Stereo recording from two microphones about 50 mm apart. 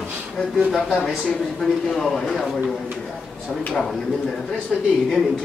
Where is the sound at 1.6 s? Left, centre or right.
Centre.